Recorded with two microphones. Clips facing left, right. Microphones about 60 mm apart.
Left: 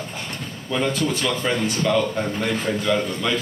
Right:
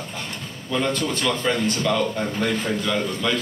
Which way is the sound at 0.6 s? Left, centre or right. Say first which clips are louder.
Left 1 dB; centre.